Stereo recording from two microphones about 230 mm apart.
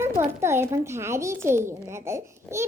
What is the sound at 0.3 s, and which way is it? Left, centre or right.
A child's voice, centre.